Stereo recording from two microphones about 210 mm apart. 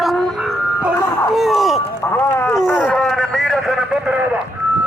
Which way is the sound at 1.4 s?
Centre (ahead or behind).